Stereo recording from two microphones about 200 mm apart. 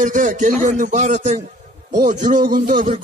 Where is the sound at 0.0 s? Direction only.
40° right (ahead or behind).